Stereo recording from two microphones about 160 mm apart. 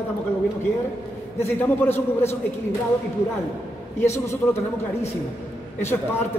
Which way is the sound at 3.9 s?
15° left (ahead or behind).